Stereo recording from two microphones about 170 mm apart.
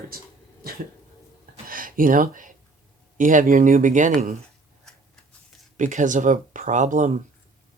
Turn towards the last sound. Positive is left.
turn(degrees=-45)  # may be behind; listen again after turning